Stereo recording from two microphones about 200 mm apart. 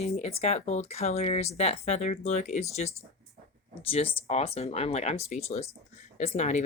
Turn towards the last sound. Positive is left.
turn(degrees=35)  # may be behind; listen again after turning